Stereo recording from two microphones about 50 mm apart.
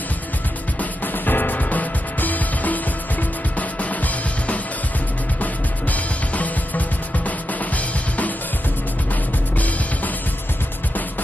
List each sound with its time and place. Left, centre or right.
0.7 s music: left
9.6 s music: left